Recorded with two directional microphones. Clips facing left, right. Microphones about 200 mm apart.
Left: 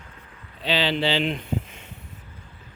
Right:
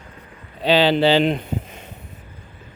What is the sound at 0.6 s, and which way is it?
Speech, 45° right (ahead or behind).